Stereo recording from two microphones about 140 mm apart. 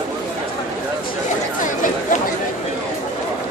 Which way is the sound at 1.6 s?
70° left (ahead or behind).